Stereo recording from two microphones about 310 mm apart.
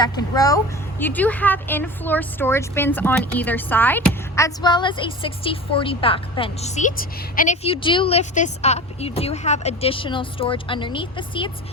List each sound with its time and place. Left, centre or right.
0.0 s speech: centre